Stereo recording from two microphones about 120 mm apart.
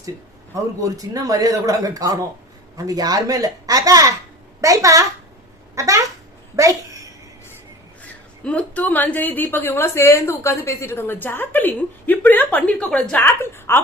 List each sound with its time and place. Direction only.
0.8 s speech: 30° right (ahead or behind)
6.6 s a sound: 30° right (ahead or behind)
8.4 s a woman's voice: 10° left (ahead or behind)